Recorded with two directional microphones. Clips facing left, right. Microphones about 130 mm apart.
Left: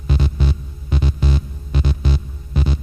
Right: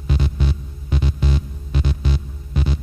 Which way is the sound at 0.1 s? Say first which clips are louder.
Left 2 dB; 35° left (ahead or behind).